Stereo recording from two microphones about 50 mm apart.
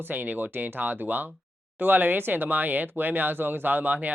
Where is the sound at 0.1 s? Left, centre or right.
Right.